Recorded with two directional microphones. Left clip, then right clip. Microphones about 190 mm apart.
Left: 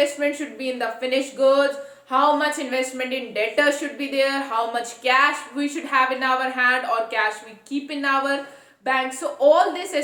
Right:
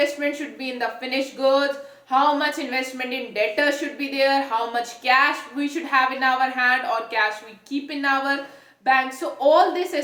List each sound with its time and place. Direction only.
0.0 s a woman's voice: 20° left (ahead or behind)